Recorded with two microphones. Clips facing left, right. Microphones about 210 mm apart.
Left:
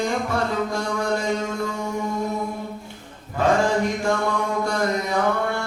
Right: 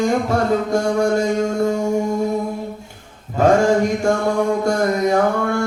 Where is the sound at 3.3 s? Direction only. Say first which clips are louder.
Right 6 dB; 45° right (ahead or behind).